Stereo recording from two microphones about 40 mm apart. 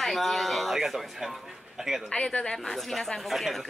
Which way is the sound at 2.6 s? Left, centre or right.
Centre.